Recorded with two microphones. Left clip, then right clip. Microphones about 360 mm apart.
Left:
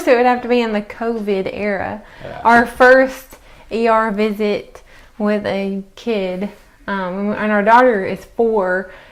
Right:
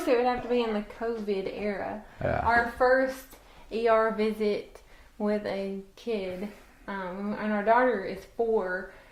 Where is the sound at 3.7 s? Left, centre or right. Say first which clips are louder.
Left 9 dB; left.